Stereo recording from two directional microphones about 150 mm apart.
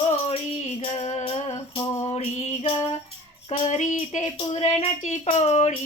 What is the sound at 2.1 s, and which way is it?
Child singing, 50° left (ahead or behind).